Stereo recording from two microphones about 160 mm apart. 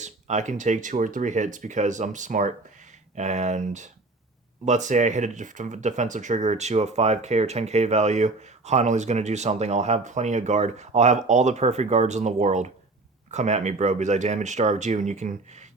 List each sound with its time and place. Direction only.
0.0 s speech: 45° right (ahead or behind)